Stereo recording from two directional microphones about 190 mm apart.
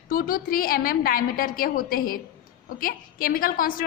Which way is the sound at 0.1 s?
50° left (ahead or behind).